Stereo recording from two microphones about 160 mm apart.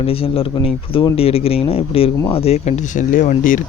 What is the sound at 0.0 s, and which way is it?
Speech, 35° left (ahead or behind).